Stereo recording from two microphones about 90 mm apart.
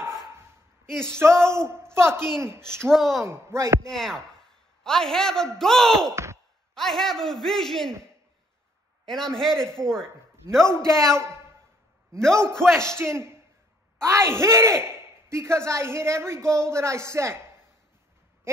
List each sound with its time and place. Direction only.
0.8 s speech: 5° left (ahead or behind)
1.1 s speech: 30° right (ahead or behind)
2.8 s a man's voice: 5° left (ahead or behind)
3.3 s a man's voice: 35° right (ahead or behind)
3.8 s a man's voice: 5° left (ahead or behind)
9.0 s a man's voice: 5° left (ahead or behind)
12.2 s speech: 5° left (ahead or behind)
12.9 s a man's voice: 30° right (ahead or behind)